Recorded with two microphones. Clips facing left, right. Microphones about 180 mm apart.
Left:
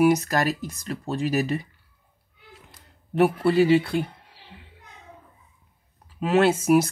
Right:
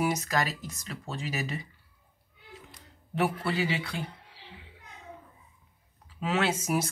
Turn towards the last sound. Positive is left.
turn(degrees=55)  # may be behind; listen again after turning